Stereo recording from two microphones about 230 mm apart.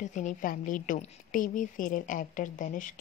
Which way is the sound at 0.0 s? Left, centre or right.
Left.